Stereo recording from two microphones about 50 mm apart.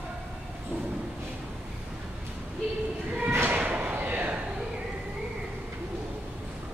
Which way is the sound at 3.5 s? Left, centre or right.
Right.